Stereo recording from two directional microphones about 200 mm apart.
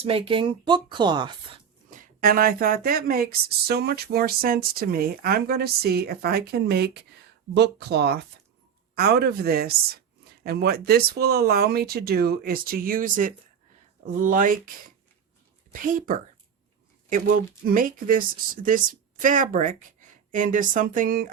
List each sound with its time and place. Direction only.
0.0 s a woman's voice: 25° right (ahead or behind)
2.0 s speech: 45° right (ahead or behind)
15.7 s a woman's voice: 40° right (ahead or behind)
17.7 s a woman's voice: 45° right (ahead or behind)